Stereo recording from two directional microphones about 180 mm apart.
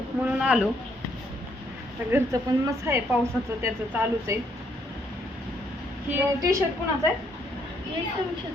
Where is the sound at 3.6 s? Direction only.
15° right (ahead or behind).